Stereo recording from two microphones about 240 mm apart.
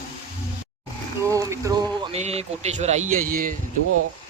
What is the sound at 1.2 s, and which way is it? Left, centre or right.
A man's voice, centre.